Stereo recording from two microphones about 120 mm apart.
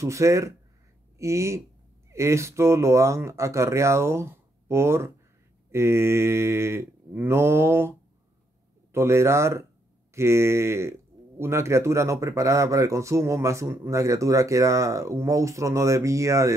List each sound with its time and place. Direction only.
0.0 s speech: 25° right (ahead or behind)
8.9 s speech: 20° right (ahead or behind)